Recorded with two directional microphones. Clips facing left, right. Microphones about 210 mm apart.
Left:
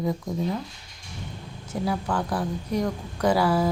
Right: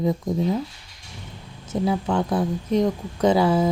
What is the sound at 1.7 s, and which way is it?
Speech, 20° right (ahead or behind).